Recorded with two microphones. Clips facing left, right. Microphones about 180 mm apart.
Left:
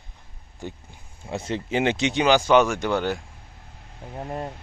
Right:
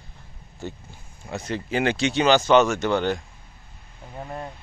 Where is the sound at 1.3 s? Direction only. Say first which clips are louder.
Left 1 dB; 25° left (ahead or behind); by 3.2 s 5° left (ahead or behind).